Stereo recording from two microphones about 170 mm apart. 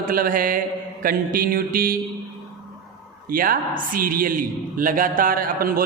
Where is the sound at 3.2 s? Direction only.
55° right (ahead or behind).